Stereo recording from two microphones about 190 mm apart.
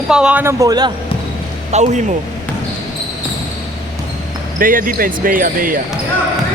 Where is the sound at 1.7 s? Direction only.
40° right (ahead or behind).